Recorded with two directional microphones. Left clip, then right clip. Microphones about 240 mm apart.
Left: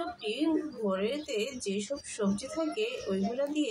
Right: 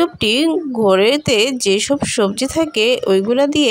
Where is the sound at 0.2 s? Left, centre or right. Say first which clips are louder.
Right 15 dB; right.